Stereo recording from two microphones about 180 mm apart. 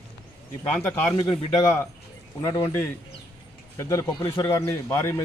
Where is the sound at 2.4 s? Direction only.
15° left (ahead or behind).